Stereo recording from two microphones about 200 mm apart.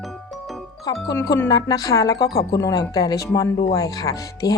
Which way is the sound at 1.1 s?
15° left (ahead or behind).